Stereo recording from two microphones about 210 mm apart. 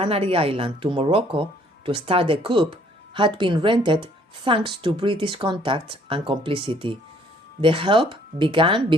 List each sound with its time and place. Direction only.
0.0 s speech: 25° right (ahead or behind)